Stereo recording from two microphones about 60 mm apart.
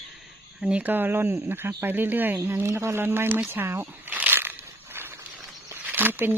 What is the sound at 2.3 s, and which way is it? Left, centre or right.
Speech, right.